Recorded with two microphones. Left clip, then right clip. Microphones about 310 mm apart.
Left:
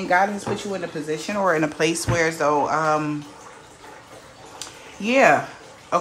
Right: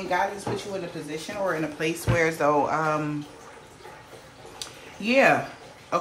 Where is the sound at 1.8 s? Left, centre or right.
Centre.